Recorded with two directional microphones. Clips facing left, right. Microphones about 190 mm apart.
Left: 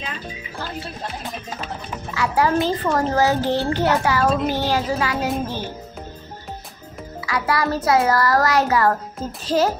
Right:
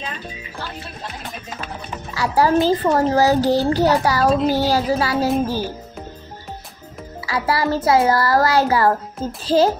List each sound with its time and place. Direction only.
2.1 s a child's voice: 35° right (ahead or behind)
7.2 s a child's voice: 30° right (ahead or behind)